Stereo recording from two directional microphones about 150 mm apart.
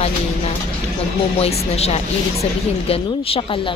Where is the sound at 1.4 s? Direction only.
45° left (ahead or behind).